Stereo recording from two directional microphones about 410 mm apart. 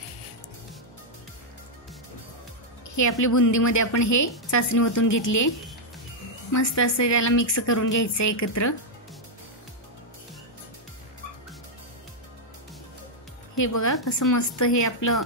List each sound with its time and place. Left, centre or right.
3.0 s a woman's voice: left
6.5 s a woman's voice: left
13.6 s a woman's voice: left